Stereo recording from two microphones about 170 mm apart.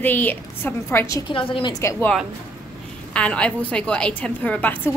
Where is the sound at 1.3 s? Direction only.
30° left (ahead or behind).